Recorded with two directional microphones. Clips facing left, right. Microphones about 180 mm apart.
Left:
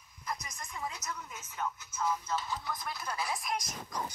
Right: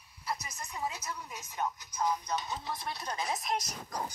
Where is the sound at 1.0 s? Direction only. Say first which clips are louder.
Right 1 dB; 30° right (ahead or behind).